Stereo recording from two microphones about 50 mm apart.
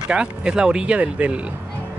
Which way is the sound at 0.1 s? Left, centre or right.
Centre.